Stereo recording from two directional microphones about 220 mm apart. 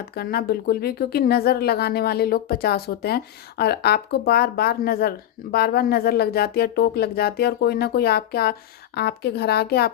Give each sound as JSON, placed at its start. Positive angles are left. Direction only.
{"t": 0.1, "sound": "speech", "side_deg": 45}